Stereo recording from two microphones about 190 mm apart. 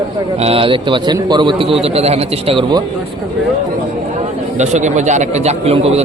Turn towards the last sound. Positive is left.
turn(degrees=-35)  # may be behind; listen again after turning